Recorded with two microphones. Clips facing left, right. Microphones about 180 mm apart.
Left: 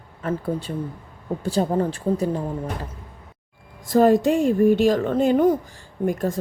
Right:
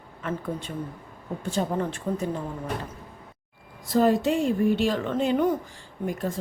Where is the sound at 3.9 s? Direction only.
50° left (ahead or behind).